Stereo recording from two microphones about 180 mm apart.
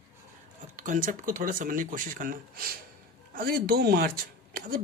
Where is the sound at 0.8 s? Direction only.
45° right (ahead or behind).